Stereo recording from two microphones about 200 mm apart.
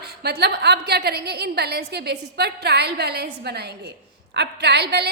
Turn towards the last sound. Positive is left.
turn(degrees=-55)  # may be behind; listen again after turning